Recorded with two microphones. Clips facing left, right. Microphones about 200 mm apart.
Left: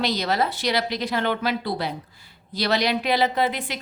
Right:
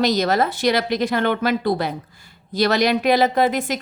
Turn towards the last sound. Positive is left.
turn(degrees=-45)  # may be behind; listen again after turning